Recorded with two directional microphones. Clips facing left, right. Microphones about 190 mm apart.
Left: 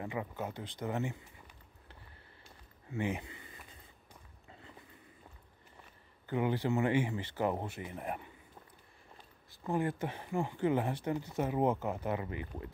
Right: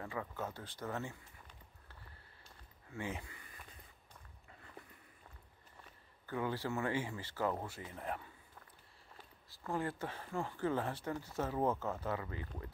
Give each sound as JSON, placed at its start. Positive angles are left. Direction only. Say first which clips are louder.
{"t": 0.0, "sound": "speech", "louder": "left 4 dB", "side_deg": 15}
{"t": 2.9, "sound": "a sound", "louder": "left 7 dB", "side_deg": 20}
{"t": 6.2, "sound": "speech", "louder": "left 6 dB", "side_deg": 20}
{"t": 9.6, "sound": "speech", "louder": "left 5 dB", "side_deg": 15}